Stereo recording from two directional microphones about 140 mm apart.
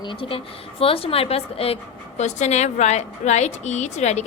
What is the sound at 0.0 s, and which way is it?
A woman's voice, 35° left (ahead or behind).